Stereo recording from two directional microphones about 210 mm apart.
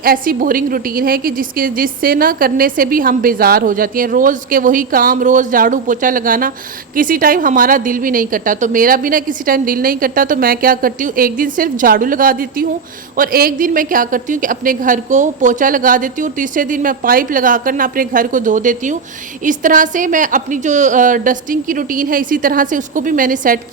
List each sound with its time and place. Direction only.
0.0 s a woman's voice: 45° right (ahead or behind)